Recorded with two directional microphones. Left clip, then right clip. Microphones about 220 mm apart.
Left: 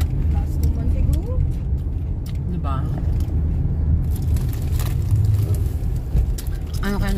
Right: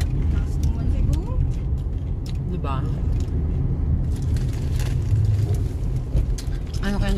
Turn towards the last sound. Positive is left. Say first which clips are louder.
# left 1 dB
turn(degrees=10)  # may be behind; listen again after turning